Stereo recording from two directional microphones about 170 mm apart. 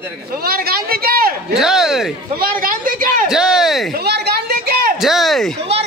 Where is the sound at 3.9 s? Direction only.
70° right (ahead or behind).